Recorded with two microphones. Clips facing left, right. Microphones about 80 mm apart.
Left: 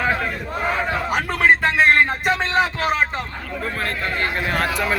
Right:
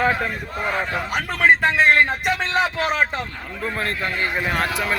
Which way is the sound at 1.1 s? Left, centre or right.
Centre.